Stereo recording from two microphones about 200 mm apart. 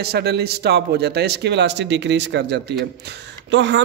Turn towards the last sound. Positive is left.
turn(degrees=-60)  # may be behind; listen again after turning